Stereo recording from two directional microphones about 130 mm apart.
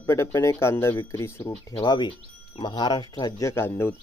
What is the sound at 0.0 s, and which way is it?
Speech, 20° left (ahead or behind).